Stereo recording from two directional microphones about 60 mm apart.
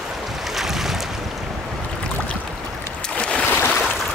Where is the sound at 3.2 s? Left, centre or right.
Left.